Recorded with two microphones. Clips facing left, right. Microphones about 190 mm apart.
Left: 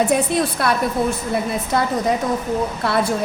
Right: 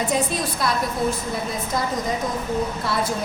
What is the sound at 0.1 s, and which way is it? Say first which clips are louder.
Speech: left 5 dB; 60° left (ahead or behind).